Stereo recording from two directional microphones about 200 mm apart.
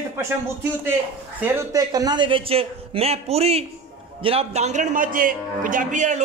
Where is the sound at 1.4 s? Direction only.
15° right (ahead or behind).